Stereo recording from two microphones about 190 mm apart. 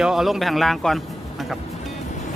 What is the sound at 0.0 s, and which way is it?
Speech, centre (ahead or behind).